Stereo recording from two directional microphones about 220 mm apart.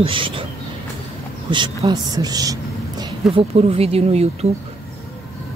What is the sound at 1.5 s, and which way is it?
Speech, 20° right (ahead or behind).